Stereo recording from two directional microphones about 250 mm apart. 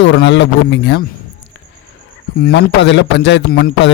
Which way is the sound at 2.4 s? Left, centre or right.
Left.